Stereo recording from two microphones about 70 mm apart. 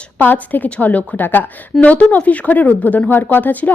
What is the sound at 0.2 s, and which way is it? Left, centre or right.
A woman's voice, left.